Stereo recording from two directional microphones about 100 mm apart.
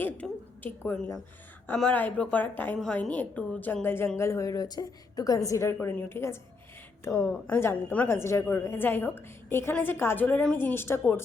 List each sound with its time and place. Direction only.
0.0 s a sound: 20° left (ahead or behind)
1.7 s a woman's voice: 5° left (ahead or behind)
2.7 s a woman's voice: 5° left (ahead or behind)
3.1 s a woman's voice: 15° left (ahead or behind); by 5.7 s 30° left (ahead or behind)
5.9 s a woman's voice: 20° left (ahead or behind)